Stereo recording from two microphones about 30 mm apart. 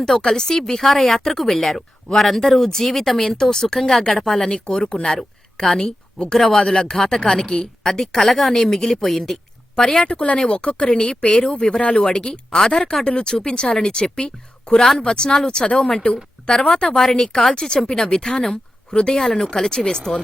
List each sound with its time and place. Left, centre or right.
0.0 s speech: centre
0.8 s speech: centre
4.4 s speech: left
5.0 s a sound: centre
5.8 s speech: left
6.4 s speech: centre
7.4 s speech: left
9.8 s speech: left
12.5 s speech: centre
13.1 s speech: left
15.8 s speech: centre
16.6 s speech: left
18.5 s speech: left
19.2 s speech: centre